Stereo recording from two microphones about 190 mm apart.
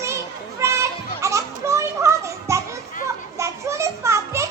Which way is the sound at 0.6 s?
15° right (ahead or behind).